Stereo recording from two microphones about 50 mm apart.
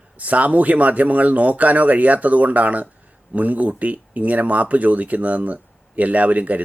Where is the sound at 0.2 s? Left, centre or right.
Right.